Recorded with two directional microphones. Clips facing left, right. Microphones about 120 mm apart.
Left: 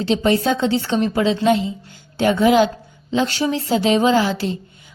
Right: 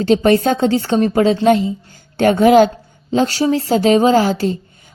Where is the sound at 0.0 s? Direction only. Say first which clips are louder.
Right 5 dB; 50° right (ahead or behind).